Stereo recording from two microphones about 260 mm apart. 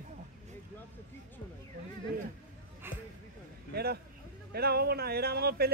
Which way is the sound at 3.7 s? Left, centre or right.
Right.